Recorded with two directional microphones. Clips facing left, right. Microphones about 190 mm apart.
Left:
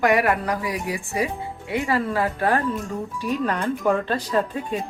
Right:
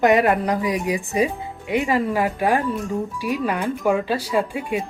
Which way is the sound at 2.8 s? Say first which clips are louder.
Right 4 dB; centre (ahead or behind).